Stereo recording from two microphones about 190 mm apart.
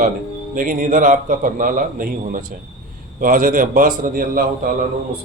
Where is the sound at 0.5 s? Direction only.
45° right (ahead or behind).